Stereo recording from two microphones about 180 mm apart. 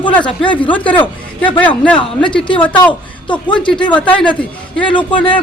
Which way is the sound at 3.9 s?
5° left (ahead or behind).